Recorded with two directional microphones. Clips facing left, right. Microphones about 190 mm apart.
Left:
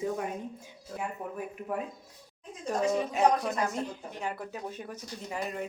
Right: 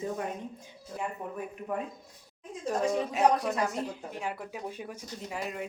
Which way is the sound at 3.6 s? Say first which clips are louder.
Even; 5° right (ahead or behind).